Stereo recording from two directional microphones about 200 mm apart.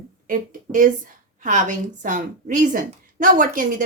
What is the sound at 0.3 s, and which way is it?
A woman's voice, 40° right (ahead or behind).